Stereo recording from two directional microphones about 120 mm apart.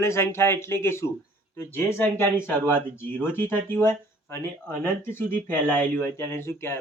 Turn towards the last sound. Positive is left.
turn(degrees=20)  # may be behind; listen again after turning